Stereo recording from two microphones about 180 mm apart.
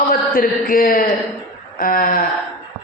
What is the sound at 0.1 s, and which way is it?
A man's voice, 50° left (ahead or behind).